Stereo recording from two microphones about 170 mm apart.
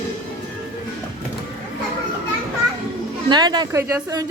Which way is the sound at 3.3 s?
25° right (ahead or behind).